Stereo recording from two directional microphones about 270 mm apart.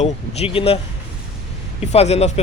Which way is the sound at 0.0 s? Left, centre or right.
Left.